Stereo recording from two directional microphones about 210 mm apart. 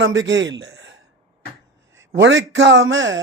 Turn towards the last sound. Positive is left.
turn(degrees=-65)  # may be behind; listen again after turning